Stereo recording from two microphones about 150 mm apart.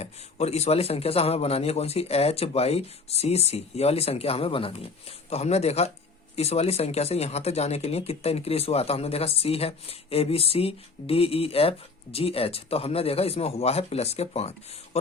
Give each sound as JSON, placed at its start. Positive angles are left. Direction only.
{"t": 0.0, "sound": "speech", "side_deg": 45}